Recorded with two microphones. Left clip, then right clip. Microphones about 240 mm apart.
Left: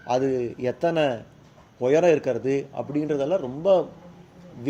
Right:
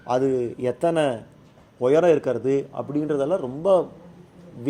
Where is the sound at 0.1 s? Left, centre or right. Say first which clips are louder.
Right 2 dB; right.